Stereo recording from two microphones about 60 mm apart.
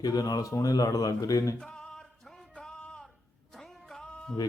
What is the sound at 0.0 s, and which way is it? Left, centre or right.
Speech, left.